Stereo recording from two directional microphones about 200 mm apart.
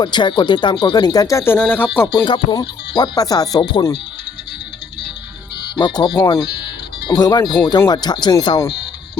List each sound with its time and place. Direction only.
0.0 s speech: 25° left (ahead or behind)
2.1 s speech: 25° left (ahead or behind)
5.7 s speech: 20° left (ahead or behind)